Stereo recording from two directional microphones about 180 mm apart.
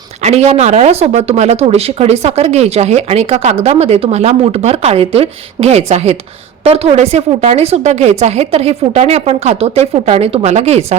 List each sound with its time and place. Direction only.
0.2 s speech: 40° right (ahead or behind)